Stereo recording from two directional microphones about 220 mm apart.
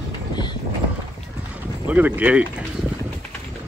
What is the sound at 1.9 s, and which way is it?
Speech, 5° right (ahead or behind).